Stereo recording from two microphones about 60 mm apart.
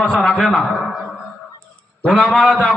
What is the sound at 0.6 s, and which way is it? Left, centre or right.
Speech, centre.